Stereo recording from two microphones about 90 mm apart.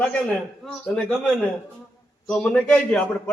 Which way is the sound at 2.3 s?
10° left (ahead or behind).